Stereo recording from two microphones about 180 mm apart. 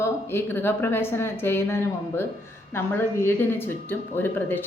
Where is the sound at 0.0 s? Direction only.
15° left (ahead or behind).